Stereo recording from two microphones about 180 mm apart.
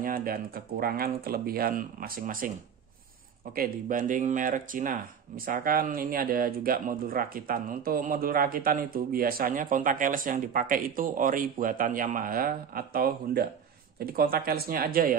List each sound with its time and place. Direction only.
0.0 s speech: 50° right (ahead or behind)
3.5 s speech: 50° right (ahead or behind)